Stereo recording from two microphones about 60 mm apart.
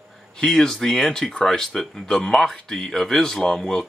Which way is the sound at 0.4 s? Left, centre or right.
Centre.